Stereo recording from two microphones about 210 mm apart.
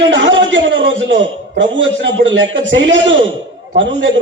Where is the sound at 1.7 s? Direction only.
60° right (ahead or behind).